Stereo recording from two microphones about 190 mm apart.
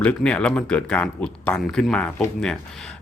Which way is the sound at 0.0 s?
5° left (ahead or behind).